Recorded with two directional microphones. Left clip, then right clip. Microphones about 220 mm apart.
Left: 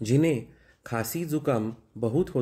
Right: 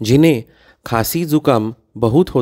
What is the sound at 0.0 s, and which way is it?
Speech, 45° right (ahead or behind).